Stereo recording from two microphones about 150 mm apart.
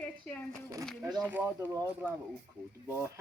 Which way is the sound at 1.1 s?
10° right (ahead or behind).